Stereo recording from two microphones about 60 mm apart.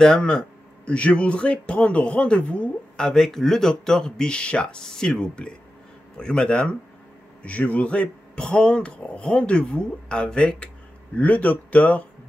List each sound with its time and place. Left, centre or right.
0.0 s a man's voice: centre